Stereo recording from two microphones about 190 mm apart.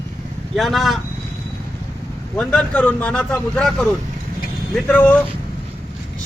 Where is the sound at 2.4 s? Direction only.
5° left (ahead or behind).